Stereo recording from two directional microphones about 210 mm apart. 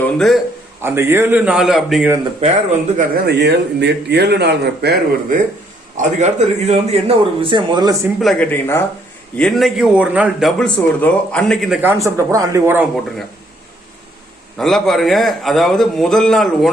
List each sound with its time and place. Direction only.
0.0 s speech: centre (ahead or behind)
0.8 s a man's voice: 10° right (ahead or behind)
2.4 s speech: 35° right (ahead or behind)
3.2 s speech: 55° right (ahead or behind)
6.0 s a man's voice: 35° right (ahead or behind)
8.2 s a man's voice: 5° left (ahead or behind)
14.6 s a man's voice: centre (ahead or behind)